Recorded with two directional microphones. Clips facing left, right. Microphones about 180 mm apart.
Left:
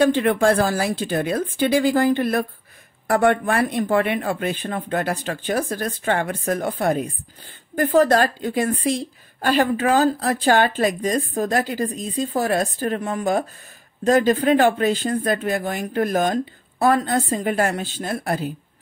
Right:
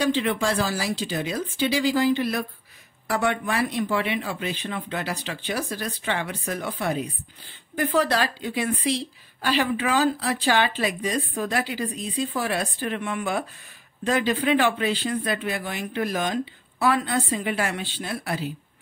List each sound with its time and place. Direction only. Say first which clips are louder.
0.0 s a woman's voice: left 6 dB; 50° left (ahead or behind)